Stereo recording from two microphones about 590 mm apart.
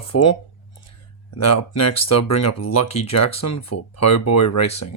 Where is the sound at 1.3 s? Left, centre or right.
Left.